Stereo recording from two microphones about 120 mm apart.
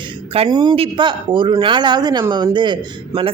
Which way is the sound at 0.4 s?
35° right (ahead or behind).